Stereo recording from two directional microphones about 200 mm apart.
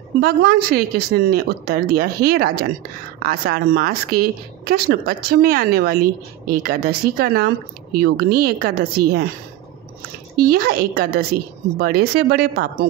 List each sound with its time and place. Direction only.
0.2 s a woman's voice: 50° right (ahead or behind)
10.3 s a woman's voice: 50° right (ahead or behind)